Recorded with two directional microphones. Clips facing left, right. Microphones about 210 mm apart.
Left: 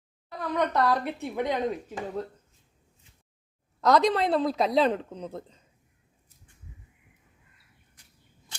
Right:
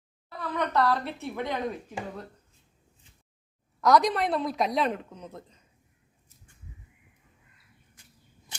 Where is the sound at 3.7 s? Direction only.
25° left (ahead or behind).